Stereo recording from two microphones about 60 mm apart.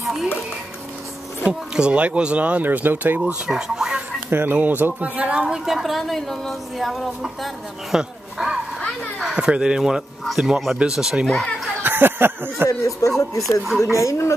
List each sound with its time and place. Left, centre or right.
0.0 s music: centre
1.4 s speech: centre; by 3.2 s right
3.4 s speech: centre
4.3 s a woman's voice: right; by 8.0 s centre
8.0 s a sound: centre
9.2 s speech: centre
11.8 s a sound: right
12.6 s speech: left
13.9 s speech: left